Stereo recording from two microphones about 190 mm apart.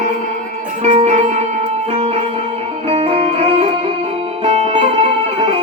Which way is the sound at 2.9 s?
30° right (ahead or behind).